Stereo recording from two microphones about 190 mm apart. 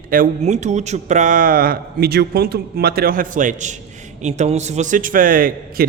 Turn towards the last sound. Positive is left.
turn(degrees=-45)  # may be behind; listen again after turning